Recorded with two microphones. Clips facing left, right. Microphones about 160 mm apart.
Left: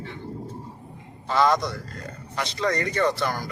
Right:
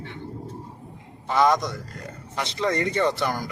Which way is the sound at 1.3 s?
15° right (ahead or behind).